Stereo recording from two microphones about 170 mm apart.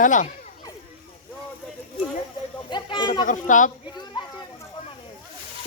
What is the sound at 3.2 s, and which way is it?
Speech, 50° left (ahead or behind).